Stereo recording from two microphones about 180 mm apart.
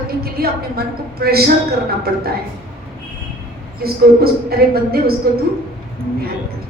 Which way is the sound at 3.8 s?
60° right (ahead or behind).